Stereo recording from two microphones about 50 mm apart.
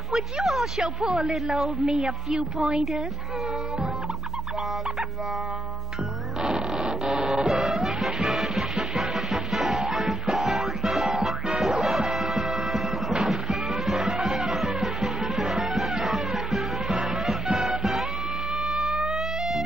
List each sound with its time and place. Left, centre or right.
0.1 s a woman's voice: centre
6.4 s music: centre